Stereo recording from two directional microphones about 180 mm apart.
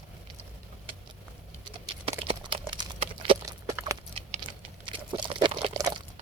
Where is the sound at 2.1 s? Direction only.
30° right (ahead or behind).